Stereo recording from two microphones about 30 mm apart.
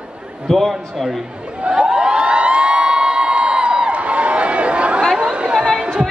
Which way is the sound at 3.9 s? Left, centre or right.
Right.